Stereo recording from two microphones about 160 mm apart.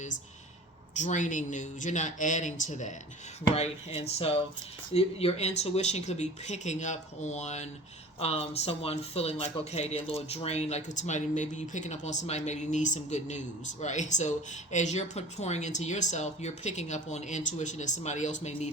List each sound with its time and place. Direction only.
0.9 s speech: 50° left (ahead or behind)
3.5 s speech: 40° left (ahead or behind)